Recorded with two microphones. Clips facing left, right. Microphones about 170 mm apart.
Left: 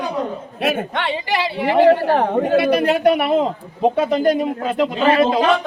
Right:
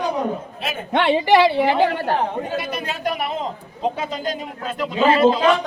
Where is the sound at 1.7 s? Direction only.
70° left (ahead or behind).